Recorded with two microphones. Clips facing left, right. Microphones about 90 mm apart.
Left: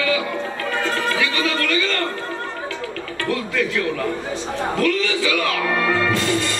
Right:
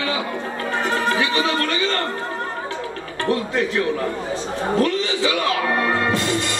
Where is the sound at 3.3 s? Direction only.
30° right (ahead or behind).